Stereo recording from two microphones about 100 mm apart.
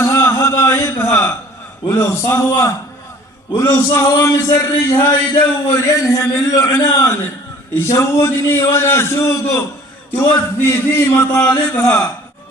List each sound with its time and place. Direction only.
0.0 s a sound: 25° left (ahead or behind)
1.9 s a man's voice: 25° left (ahead or behind)
4.9 s speech: 50° left (ahead or behind)
5.7 s a man's voice: 30° left (ahead or behind)